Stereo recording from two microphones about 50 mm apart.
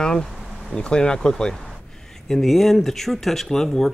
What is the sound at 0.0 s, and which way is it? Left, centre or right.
Speech, centre.